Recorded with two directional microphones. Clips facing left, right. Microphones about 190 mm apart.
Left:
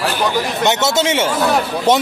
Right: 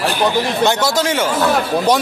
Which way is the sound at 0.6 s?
25° left (ahead or behind).